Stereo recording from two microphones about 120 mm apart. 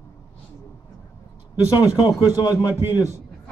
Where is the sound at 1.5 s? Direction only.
30° left (ahead or behind).